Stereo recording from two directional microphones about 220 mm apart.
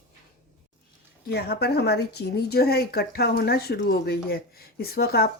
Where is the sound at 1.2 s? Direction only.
45° left (ahead or behind).